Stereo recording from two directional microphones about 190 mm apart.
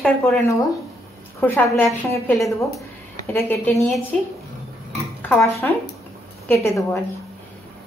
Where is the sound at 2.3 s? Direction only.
Centre (ahead or behind).